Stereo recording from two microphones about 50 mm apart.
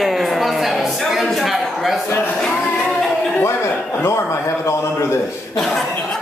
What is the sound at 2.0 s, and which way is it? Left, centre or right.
Speech, left.